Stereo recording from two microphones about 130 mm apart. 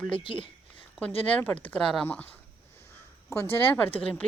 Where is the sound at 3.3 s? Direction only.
20° left (ahead or behind).